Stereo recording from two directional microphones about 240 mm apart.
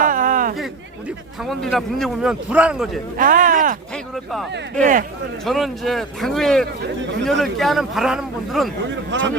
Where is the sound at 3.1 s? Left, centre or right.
Right.